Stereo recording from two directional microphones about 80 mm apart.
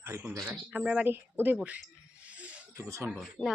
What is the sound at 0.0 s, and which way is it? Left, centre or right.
Speech, right.